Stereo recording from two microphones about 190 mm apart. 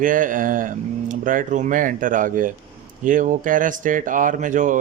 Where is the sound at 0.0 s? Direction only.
45° right (ahead or behind).